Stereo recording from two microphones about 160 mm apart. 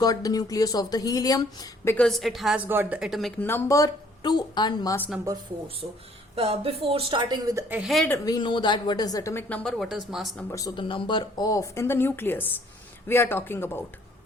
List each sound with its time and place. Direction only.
0.0 s speech: 25° left (ahead or behind)
2.0 s speech: centre (ahead or behind)
2.6 s speech: 10° right (ahead or behind)
3.4 s speech: 15° left (ahead or behind)
5.3 s speech: 20° right (ahead or behind)
6.3 s speech: 35° right (ahead or behind)
7.7 s speech: 5° right (ahead or behind)
8.1 s speech: 25° left (ahead or behind)
9.6 s speech: centre (ahead or behind)
10.5 s a man's voice: 25° left (ahead or behind)